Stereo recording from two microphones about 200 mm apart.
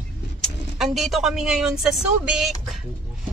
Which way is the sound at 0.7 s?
Centre (ahead or behind).